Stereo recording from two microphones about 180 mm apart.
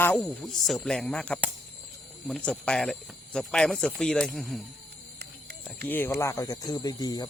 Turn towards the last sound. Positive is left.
turn(degrees=20)  # may be behind; listen again after turning